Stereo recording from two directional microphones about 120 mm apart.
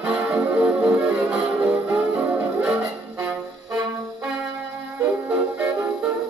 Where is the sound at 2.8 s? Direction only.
25° right (ahead or behind).